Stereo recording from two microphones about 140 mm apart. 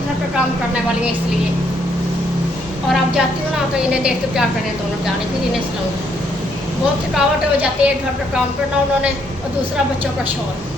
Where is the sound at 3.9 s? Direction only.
5° right (ahead or behind).